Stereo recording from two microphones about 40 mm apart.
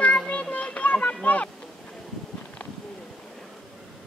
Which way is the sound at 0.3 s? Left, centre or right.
Left.